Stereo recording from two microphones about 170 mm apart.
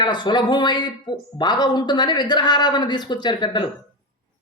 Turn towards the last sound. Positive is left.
turn(degrees=25)  # may be behind; listen again after turning